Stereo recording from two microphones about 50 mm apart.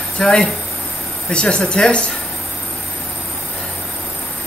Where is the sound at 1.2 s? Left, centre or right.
Centre.